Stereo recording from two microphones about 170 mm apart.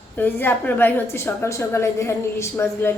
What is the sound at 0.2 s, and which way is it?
A woman's voice, 10° left (ahead or behind).